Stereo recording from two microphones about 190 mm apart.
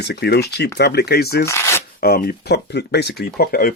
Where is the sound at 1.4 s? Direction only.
15° left (ahead or behind).